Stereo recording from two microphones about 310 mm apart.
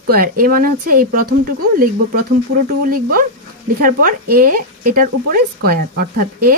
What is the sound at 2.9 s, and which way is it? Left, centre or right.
Speech, right.